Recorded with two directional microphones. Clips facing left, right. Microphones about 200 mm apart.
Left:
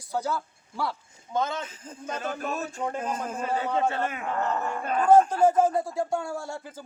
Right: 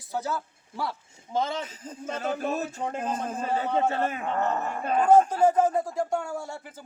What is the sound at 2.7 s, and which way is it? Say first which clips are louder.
A man's voice: even; 25° right (ahead or behind).